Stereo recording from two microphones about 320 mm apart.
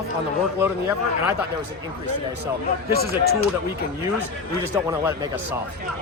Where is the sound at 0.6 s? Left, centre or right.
Centre.